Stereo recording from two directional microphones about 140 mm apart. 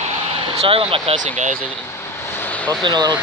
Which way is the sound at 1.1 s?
60° right (ahead or behind).